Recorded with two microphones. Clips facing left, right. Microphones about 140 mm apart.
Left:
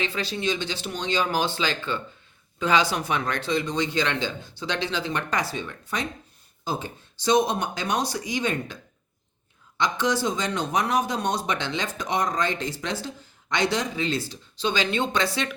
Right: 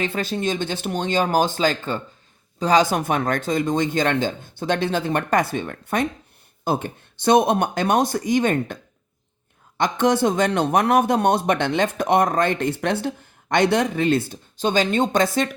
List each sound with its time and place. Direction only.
0.0 s a man's voice: 50° right (ahead or behind)